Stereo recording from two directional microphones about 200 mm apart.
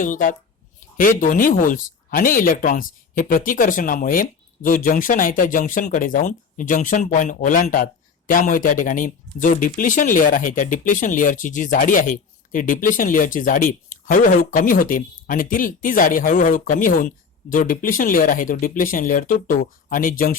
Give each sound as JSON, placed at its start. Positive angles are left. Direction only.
{"t": 0.0, "sound": "speech", "side_deg": 40}